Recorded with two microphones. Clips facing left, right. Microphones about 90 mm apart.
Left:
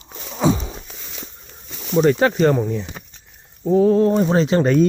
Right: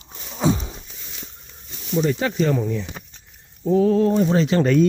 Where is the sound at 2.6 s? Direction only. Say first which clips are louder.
Left 2 dB; 30° left (ahead or behind).